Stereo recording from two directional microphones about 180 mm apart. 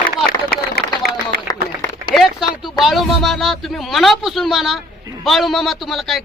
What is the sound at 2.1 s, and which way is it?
Speech, centre (ahead or behind).